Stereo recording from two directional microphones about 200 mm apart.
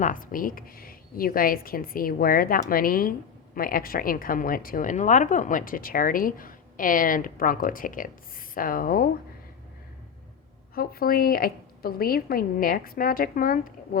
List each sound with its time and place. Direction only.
0.0 s a woman's voice: 45° left (ahead or behind)
10.8 s a woman's voice: 45° left (ahead or behind)